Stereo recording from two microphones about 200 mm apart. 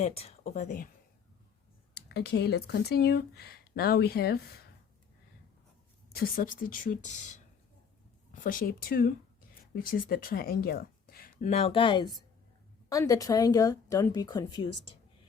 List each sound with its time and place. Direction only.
0.0 s speech: 30° left (ahead or behind)
2.0 s speech: 55° left (ahead or behind)
6.1 s a woman's voice: 45° left (ahead or behind); by 14.9 s 25° left (ahead or behind)